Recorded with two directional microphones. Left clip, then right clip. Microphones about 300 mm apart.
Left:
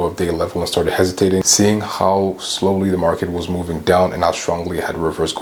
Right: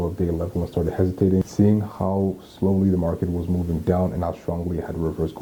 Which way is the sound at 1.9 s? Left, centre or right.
Centre.